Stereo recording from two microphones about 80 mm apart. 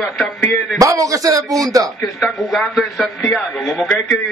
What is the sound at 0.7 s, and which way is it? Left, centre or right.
A man's voice, right.